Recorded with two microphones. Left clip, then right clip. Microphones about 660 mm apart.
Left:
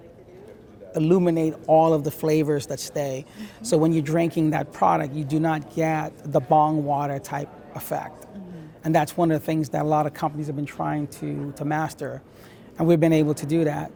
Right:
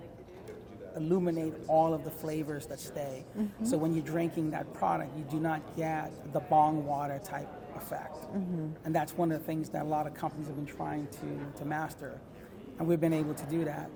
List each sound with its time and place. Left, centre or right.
0.9 s a man's voice: left